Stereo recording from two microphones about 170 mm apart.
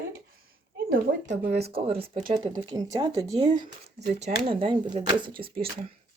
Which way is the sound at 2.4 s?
25° right (ahead or behind).